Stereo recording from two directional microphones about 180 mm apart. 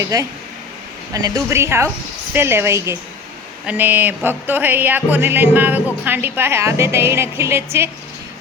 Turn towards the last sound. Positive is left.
turn(degrees=-15)  # may be behind; listen again after turning